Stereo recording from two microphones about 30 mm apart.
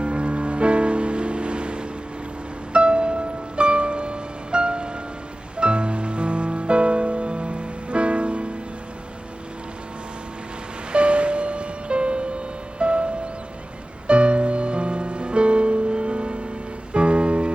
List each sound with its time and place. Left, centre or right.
0.0 s music: right
10.9 s music: right